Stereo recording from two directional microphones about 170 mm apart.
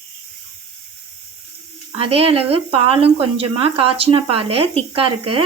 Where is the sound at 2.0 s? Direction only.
35° right (ahead or behind).